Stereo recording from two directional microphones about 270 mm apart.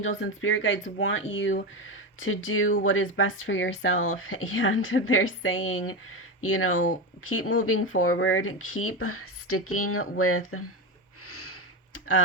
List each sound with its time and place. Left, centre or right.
0.0 s speech: left
11.3 s sniff: left